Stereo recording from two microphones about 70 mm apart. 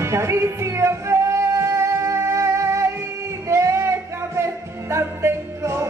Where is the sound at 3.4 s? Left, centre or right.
Right.